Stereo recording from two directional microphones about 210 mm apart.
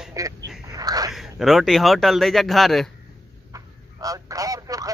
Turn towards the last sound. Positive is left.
turn(degrees=-15)  # may be behind; listen again after turning